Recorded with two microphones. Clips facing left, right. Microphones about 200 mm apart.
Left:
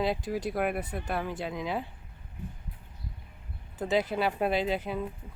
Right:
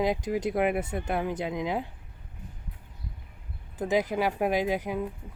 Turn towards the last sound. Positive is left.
turn(degrees=-15)  # may be behind; listen again after turning